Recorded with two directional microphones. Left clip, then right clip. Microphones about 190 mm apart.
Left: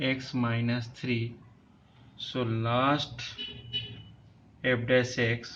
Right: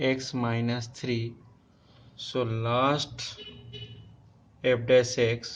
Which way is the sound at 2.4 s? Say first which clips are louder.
Right 2 dB; 60° right (ahead or behind).